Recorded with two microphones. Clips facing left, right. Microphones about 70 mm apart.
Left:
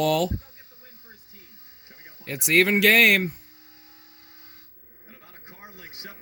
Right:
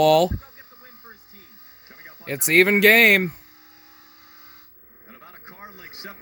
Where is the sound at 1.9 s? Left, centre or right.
Right.